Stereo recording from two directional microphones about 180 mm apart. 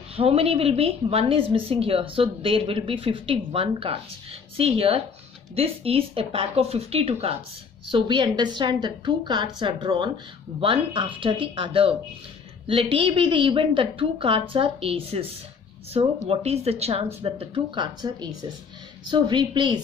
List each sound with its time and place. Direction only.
0.1 s a woman's voice: 35° right (ahead or behind)
12.9 s a woman's voice: 30° right (ahead or behind)